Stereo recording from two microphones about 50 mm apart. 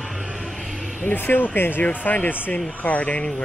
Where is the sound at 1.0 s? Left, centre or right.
Left.